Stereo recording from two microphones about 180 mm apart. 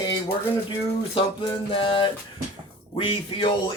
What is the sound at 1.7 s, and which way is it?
Speech, 30° left (ahead or behind).